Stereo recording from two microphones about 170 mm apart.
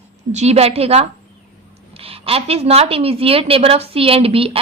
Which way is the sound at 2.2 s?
35° right (ahead or behind).